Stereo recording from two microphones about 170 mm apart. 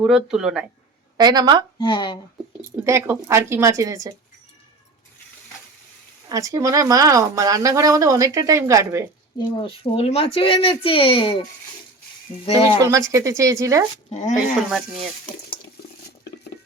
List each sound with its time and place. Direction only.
0.0 s speech: 5° right (ahead or behind)
1.1 s speech: 25° right (ahead or behind)
1.8 s speech: 25° left (ahead or behind)
2.6 s speech: 15° right (ahead or behind)
6.2 s speech: 20° right (ahead or behind)
9.4 s speech: 30° left (ahead or behind)
12.5 s speech: 20° right (ahead or behind)
14.1 s speech: 45° left (ahead or behind)